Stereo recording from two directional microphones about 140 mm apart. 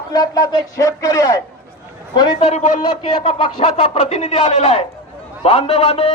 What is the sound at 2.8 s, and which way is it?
A man's voice, 35° left (ahead or behind).